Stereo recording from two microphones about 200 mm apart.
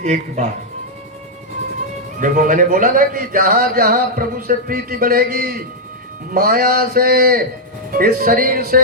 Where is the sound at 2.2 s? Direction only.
40° right (ahead or behind).